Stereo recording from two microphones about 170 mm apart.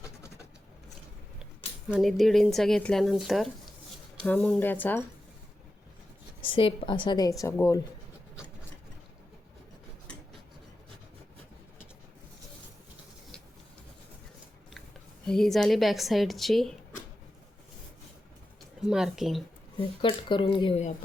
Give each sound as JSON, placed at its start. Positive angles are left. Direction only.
{"t": 1.9, "sound": "speech", "side_deg": 0}
{"t": 6.4, "sound": "a woman's voice", "side_deg": 30}
{"t": 15.3, "sound": "speech", "side_deg": 0}
{"t": 18.8, "sound": "speech", "side_deg": -5}
{"t": 20.0, "sound": "a woman's voice", "side_deg": 30}